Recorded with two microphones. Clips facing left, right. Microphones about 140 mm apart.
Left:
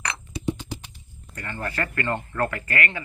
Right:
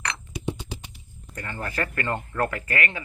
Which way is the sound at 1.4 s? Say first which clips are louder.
Even; 15° right (ahead or behind).